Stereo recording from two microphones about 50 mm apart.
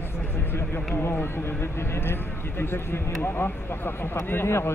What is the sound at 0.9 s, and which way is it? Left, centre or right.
Speech, left.